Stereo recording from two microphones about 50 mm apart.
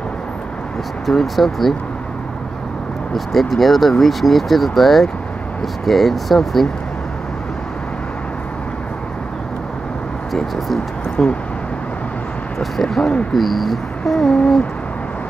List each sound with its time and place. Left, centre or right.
1.0 s speech: centre
3.3 s speech: centre
11.2 s speech: centre
12.5 s speech: centre
14.2 s a sound: left